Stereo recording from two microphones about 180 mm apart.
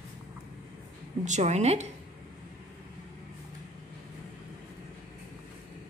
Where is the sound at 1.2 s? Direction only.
40° right (ahead or behind).